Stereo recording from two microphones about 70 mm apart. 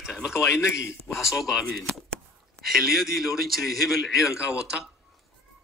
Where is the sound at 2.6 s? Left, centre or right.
Centre.